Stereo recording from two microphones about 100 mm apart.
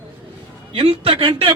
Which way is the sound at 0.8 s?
65° right (ahead or behind).